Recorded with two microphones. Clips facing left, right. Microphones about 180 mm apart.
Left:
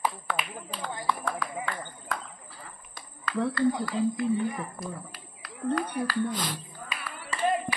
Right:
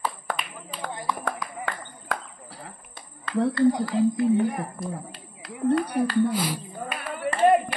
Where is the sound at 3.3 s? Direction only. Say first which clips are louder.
Right 5 dB; 30° right (ahead or behind).